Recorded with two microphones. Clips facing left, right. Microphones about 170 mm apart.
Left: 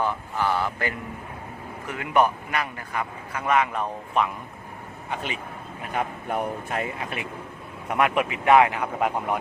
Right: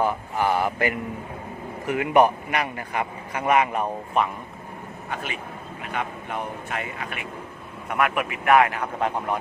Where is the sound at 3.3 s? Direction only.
15° right (ahead or behind).